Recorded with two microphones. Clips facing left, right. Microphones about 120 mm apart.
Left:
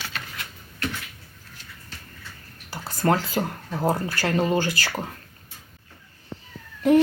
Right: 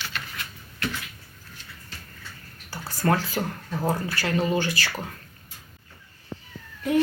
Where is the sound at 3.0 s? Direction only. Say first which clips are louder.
Left 2 dB; 25° left (ahead or behind).